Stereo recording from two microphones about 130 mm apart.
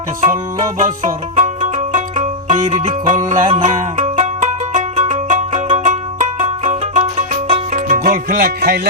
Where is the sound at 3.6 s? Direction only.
70° right (ahead or behind).